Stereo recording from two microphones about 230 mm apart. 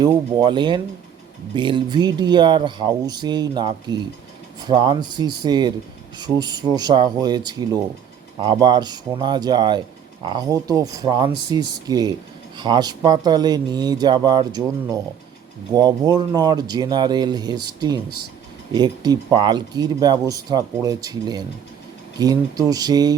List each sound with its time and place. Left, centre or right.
0.0 s speech: centre